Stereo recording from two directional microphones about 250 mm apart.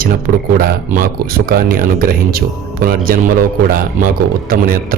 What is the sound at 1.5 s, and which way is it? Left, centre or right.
Speech, right.